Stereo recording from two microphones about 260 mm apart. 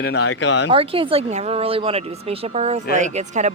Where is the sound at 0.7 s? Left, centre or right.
Right.